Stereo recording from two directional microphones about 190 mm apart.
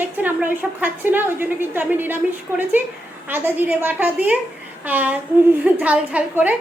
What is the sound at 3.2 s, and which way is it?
A woman's voice, 10° right (ahead or behind).